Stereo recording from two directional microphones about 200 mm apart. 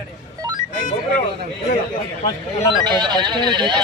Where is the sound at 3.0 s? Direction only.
20° right (ahead or behind).